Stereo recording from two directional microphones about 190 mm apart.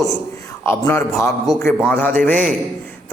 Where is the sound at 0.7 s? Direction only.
10° left (ahead or behind).